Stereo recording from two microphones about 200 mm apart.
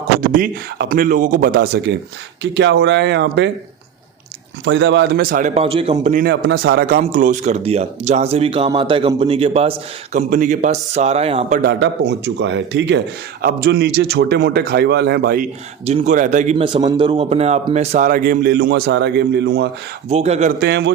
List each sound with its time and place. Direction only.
0.2 s a man's voice: 45° right (ahead or behind)
4.6 s a man's voice: 60° right (ahead or behind)
5.5 s speech: 30° right (ahead or behind)
6.2 s speech: 50° right (ahead or behind); by 11.6 s 30° right (ahead or behind)
11.6 s a man's voice: 60° right (ahead or behind)
15.9 s speech: 35° right (ahead or behind)
16.6 s speech: 25° right (ahead or behind); by 19.6 s 55° right (ahead or behind)
20.1 s speech: 30° right (ahead or behind)
20.6 s a man's voice: 60° right (ahead or behind)